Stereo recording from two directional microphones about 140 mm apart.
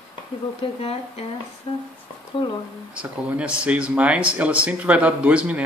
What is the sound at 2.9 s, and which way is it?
Speech, 10° right (ahead or behind).